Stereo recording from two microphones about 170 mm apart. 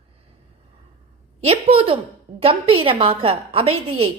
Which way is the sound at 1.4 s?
35° right (ahead or behind).